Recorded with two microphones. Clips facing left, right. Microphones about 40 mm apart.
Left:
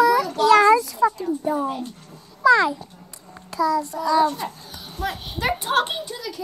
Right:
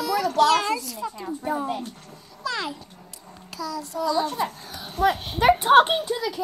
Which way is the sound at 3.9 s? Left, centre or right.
Centre.